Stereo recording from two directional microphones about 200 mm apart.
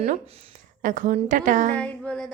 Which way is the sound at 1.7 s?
5° left (ahead or behind).